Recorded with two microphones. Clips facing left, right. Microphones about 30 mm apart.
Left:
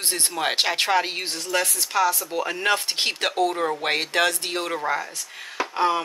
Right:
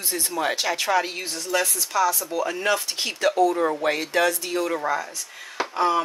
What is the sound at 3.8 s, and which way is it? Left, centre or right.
Speech, left.